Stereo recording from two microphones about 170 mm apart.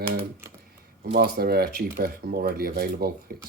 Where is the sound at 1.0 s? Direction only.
65° right (ahead or behind).